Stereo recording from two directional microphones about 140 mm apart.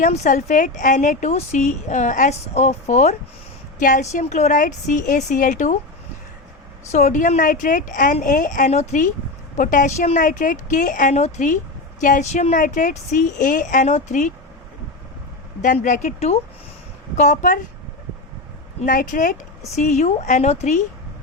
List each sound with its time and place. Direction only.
0.0 s a woman's voice: 60° left (ahead or behind)
3.8 s a woman's voice: 70° left (ahead or behind)
6.9 s a woman's voice: 60° left (ahead or behind)
9.6 s a woman's voice: 70° left (ahead or behind)
13.8 s a woman's voice: 60° left (ahead or behind)
15.6 s a woman's voice: 65° left (ahead or behind)
18.9 s a woman's voice: 75° left (ahead or behind)
19.7 s a woman's voice: 55° left (ahead or behind)